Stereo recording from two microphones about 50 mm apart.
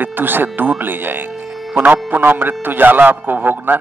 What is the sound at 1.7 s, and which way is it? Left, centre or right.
Speech, right.